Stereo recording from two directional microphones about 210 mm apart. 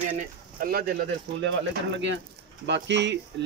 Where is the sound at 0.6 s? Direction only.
45° right (ahead or behind).